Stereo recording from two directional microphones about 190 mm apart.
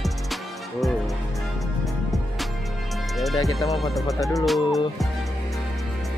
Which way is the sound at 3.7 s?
Centre (ahead or behind).